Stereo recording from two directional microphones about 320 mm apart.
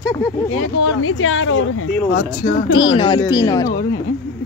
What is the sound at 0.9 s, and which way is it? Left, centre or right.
A woman's voice, left.